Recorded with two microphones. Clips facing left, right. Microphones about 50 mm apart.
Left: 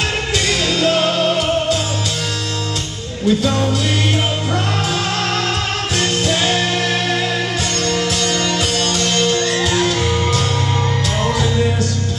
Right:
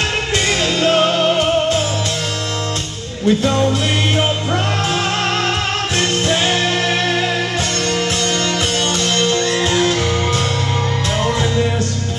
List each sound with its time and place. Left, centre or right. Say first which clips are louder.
0.7 s music: right 2 dB; right
3.3 s music: right 1 dB; right
5.9 s music: even; right
9.1 s music: even; centre